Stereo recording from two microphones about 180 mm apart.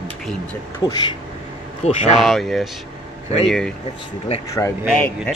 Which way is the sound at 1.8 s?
35° left (ahead or behind).